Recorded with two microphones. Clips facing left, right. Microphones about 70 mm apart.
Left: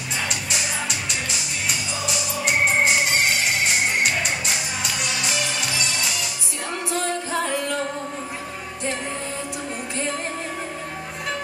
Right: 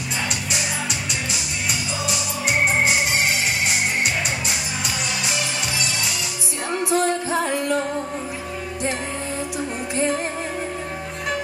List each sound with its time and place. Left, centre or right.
0.3 s music: centre
9.9 s music: centre